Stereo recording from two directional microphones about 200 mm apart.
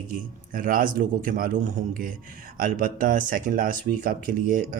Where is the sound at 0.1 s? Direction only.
45° right (ahead or behind).